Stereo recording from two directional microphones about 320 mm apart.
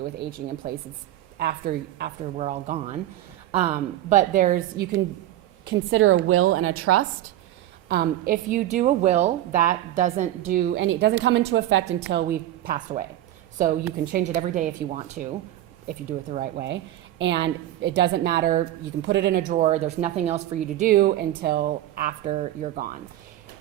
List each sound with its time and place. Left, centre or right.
0.0 s a woman's voice: right
2.4 s a woman's voice: centre
5.6 s a woman's voice: right
7.9 s a woman's voice: right
19.5 s a woman's voice: right